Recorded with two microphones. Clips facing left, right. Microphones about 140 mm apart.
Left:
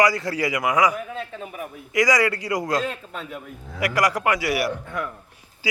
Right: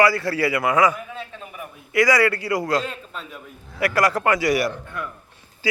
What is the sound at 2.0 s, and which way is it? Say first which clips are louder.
A man's voice: right 2 dB; 15° left (ahead or behind).